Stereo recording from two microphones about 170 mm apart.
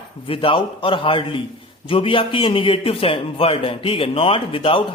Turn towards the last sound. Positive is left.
turn(degrees=30)  # may be behind; listen again after turning